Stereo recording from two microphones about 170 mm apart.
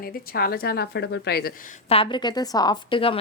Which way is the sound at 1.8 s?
35° left (ahead or behind).